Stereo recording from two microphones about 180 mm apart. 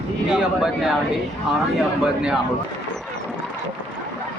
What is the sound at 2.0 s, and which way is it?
Speech, 5° right (ahead or behind).